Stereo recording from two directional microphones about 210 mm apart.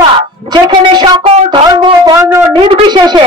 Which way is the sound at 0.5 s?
20° right (ahead or behind).